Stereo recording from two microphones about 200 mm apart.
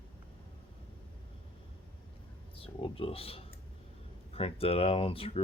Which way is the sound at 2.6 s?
25° left (ahead or behind).